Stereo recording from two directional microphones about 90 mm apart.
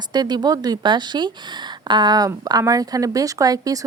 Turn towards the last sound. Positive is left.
turn(degrees=-45)  # may be behind; listen again after turning